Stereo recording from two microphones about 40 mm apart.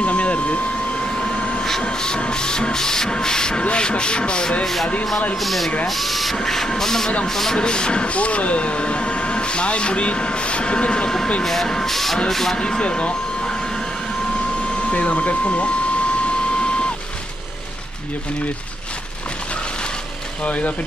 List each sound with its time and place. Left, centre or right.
0.0 s vacuum cleaner: left
1.1 s a sound: left
1.8 s speech: left
5.3 s speech: centre
6.3 s vehicle: centre
7.5 s speech: left
11.6 s vehicle: centre
12.5 s speech: centre
14.9 s speech: left
20.4 s speech: left